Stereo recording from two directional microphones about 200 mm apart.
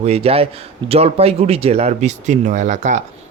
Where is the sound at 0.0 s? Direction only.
30° right (ahead or behind).